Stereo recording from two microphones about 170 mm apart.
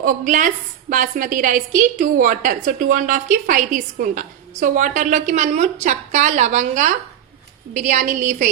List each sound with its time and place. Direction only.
0.0 s a woman's voice: 50° right (ahead or behind)